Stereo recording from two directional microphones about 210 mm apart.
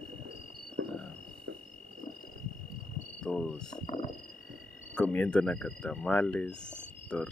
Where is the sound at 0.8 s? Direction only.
60° right (ahead or behind).